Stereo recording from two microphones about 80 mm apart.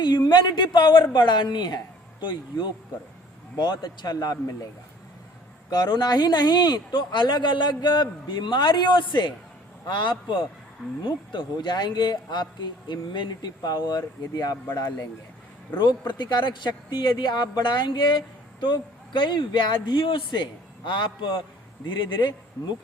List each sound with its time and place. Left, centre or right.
0.0 s speech: left
5.7 s speech: left
15.8 s speech: left
18.6 s speech: left
21.8 s speech: left